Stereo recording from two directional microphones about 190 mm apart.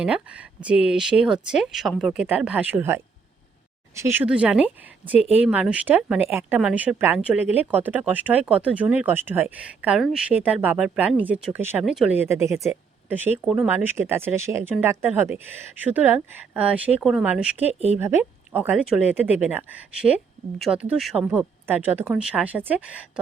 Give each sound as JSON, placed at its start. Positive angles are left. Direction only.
{"t": 0.0, "sound": "speech", "side_deg": -5}
{"t": 17.7, "sound": "speech", "side_deg": -35}
{"t": 18.0, "sound": "speech", "side_deg": -10}